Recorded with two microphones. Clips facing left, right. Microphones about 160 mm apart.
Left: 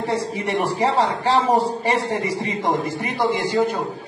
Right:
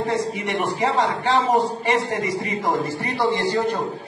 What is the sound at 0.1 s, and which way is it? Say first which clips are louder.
A man's voice: left 1 dB; 30° left (ahead or behind).